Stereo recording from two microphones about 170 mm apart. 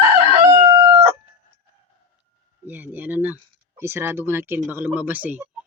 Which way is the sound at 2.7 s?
10° right (ahead or behind).